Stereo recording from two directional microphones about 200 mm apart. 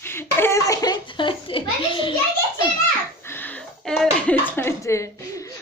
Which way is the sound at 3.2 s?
10° left (ahead or behind).